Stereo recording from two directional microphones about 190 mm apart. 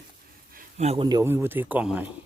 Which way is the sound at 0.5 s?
35° right (ahead or behind).